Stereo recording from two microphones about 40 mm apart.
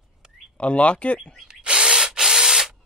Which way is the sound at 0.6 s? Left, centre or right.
Left.